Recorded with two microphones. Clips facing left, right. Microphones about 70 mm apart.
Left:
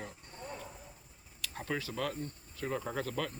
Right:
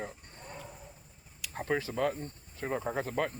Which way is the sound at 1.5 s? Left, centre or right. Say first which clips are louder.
Right 5 dB; right.